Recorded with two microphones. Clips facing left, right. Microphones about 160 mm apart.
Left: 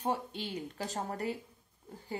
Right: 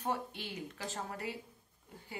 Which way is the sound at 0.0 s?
20° left (ahead or behind).